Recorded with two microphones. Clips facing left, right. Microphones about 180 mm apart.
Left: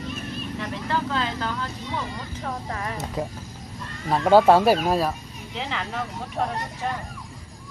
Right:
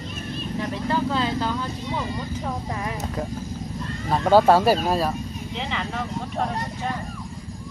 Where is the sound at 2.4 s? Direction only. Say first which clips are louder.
Right 2 dB; 10° right (ahead or behind).